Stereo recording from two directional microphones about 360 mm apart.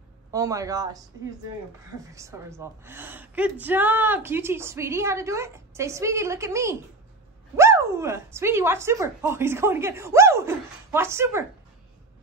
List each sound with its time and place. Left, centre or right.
0.3 s a woman's voice: centre
2.1 s a woman's voice: centre